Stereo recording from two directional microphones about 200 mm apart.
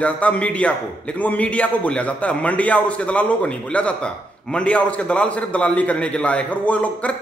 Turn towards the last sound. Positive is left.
turn(degrees=5)  # may be behind; listen again after turning